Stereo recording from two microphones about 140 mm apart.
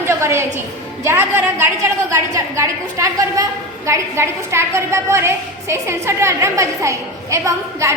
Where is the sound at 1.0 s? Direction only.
20° right (ahead or behind).